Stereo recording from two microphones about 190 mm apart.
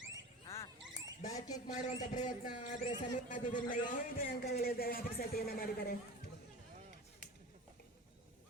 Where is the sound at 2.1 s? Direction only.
40° left (ahead or behind).